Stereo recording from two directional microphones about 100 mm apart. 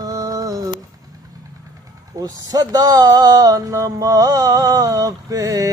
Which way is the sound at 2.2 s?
40° right (ahead or behind).